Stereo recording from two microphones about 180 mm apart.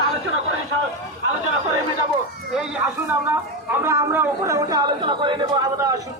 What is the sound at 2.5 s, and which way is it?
A man's voice, 10° right (ahead or behind).